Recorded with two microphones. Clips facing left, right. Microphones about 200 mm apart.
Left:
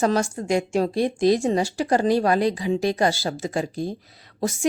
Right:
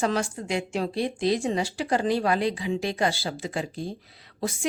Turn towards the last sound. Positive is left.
turn(degrees=45)  # may be behind; listen again after turning